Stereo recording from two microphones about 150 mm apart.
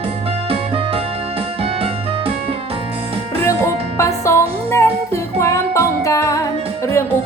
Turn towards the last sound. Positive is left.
turn(degrees=20)  # may be behind; listen again after turning